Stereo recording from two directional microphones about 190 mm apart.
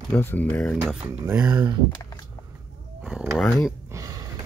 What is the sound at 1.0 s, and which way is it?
Speech, 10° right (ahead or behind).